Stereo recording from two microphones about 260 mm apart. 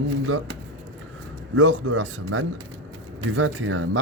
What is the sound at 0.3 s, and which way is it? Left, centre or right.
Speech, right.